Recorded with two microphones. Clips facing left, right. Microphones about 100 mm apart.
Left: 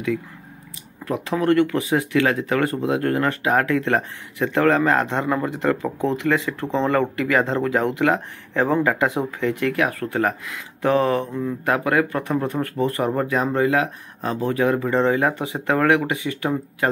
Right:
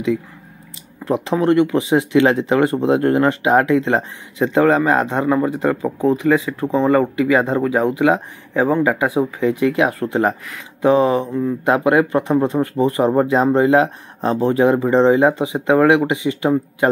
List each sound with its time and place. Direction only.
1.0 s speech: 25° right (ahead or behind)